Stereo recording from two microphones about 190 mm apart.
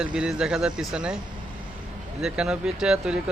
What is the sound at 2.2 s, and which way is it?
Speech, 5° right (ahead or behind).